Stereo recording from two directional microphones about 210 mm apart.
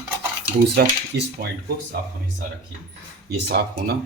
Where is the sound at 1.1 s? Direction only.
50° right (ahead or behind).